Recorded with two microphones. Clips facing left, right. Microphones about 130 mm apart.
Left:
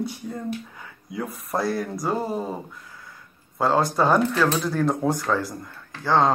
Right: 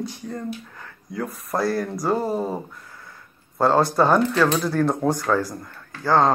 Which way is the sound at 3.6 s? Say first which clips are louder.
Right 3 dB; centre (ahead or behind).